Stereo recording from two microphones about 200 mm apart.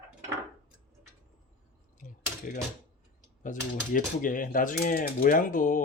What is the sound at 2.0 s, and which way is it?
Cutlery, 40° left (ahead or behind).